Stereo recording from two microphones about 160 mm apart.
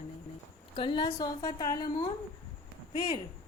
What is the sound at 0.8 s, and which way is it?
A woman's voice, 30° left (ahead or behind).